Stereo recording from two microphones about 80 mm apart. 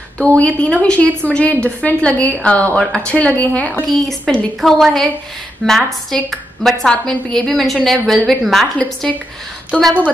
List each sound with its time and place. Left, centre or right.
0.2 s a woman's voice: centre
4.6 s a woman's voice: centre